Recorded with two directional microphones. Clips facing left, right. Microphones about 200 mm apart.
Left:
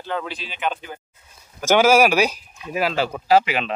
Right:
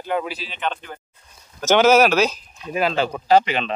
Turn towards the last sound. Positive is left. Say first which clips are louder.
# right 1 dB
turn(degrees=5)  # may be behind; listen again after turning